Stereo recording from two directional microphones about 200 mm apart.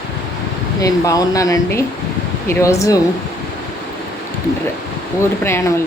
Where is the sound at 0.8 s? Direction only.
15° left (ahead or behind).